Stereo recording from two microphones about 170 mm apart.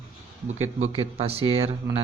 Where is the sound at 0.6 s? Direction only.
40° right (ahead or behind).